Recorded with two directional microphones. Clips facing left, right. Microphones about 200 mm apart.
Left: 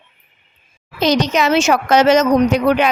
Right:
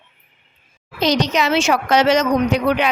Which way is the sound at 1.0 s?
50° left (ahead or behind).